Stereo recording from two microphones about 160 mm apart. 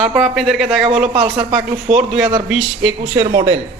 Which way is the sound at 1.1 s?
20° right (ahead or behind).